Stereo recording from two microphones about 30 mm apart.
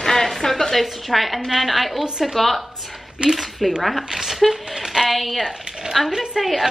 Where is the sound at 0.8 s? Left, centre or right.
Centre.